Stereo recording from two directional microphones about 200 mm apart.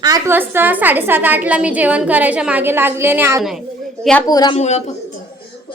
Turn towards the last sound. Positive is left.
turn(degrees=35)  # may be behind; listen again after turning